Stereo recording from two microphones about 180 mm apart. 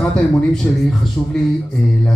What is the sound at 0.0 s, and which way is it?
Speech, 5° left (ahead or behind).